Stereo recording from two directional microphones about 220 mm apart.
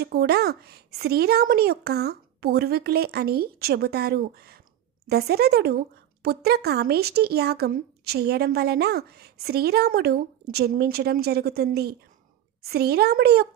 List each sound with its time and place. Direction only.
0.0 s a woman's voice: 45° right (ahead or behind)